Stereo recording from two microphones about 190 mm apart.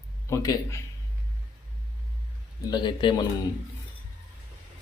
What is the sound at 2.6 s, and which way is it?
Speech, 25° left (ahead or behind).